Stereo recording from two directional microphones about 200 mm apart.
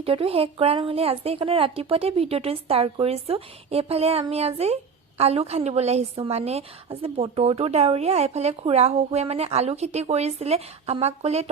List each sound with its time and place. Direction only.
0.0 s a woman's voice: 30° right (ahead or behind)